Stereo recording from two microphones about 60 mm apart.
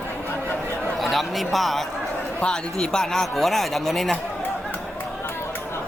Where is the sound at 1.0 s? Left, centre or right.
Centre.